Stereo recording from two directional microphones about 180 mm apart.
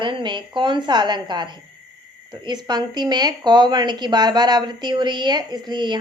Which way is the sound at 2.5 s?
25° right (ahead or behind).